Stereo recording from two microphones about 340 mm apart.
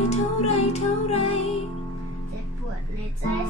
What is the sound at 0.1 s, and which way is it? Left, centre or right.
Music, centre.